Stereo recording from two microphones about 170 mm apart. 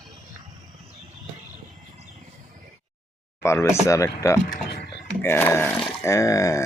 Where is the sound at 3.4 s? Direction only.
15° left (ahead or behind).